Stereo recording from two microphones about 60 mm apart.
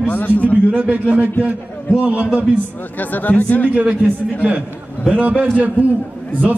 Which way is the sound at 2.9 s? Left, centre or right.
Left.